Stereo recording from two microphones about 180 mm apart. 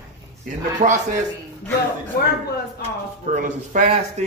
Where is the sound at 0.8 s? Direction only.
45° right (ahead or behind).